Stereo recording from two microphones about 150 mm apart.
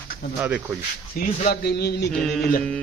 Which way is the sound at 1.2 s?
90° left.